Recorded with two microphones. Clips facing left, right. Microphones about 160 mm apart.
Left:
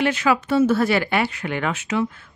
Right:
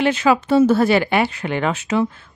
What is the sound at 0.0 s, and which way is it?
Speech, 25° right (ahead or behind).